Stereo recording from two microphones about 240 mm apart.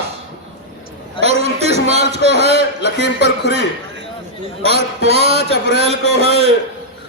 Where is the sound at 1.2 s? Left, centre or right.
Right.